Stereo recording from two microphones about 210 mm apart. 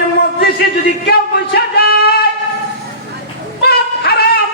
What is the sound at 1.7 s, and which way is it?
Singing, 50° left (ahead or behind).